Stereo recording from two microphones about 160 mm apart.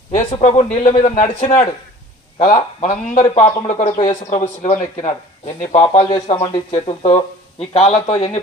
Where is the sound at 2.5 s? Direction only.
35° left (ahead or behind).